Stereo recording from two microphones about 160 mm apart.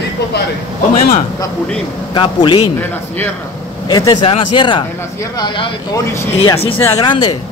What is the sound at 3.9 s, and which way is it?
Speech, 25° left (ahead or behind).